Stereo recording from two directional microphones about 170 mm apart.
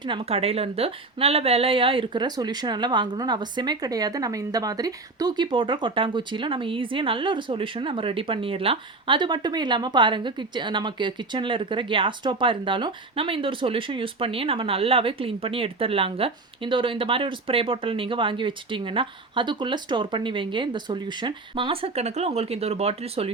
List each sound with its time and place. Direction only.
0.0 s a woman's voice: 30° right (ahead or behind)